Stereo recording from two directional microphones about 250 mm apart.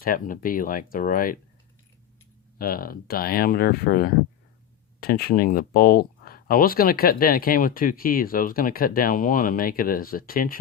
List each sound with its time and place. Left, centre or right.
0.0 s speech: left
2.6 s speech: left